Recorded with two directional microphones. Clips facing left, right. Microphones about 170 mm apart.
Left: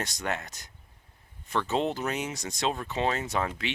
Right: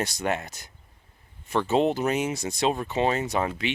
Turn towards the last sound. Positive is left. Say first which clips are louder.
# right 4 dB
turn(degrees=-10)  # may be behind; listen again after turning